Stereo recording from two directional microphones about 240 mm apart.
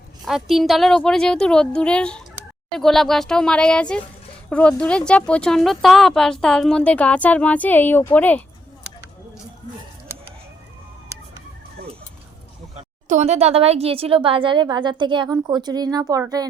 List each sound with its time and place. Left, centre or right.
0.3 s a woman's voice: centre
12.7 s speech: right